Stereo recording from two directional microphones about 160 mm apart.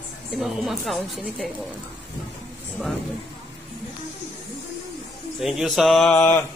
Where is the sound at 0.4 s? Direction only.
Centre (ahead or behind).